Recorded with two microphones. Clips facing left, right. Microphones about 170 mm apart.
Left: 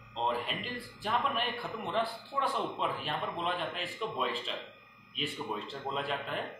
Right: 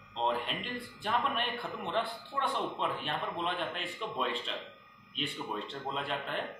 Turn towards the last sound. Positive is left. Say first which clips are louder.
# left 1 dB
turn(degrees=0)  # may be behind; listen again after turning